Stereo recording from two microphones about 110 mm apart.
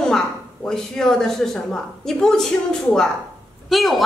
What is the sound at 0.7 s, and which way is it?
A woman's voice, 5° left (ahead or behind).